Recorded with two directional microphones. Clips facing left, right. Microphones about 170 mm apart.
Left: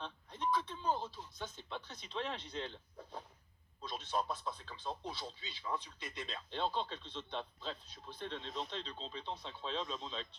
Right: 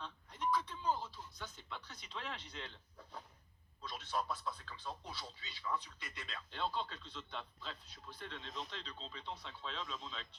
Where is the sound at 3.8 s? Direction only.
20° left (ahead or behind).